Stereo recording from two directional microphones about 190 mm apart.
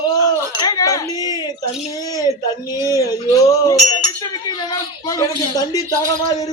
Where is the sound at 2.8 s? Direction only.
20° left (ahead or behind).